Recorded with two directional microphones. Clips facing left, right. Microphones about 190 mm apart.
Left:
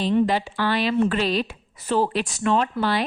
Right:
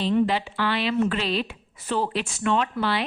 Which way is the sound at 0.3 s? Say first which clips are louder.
Left 2 dB; 45° left (ahead or behind).